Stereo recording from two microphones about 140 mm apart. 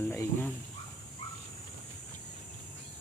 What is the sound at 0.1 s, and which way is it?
Speech, 10° left (ahead or behind).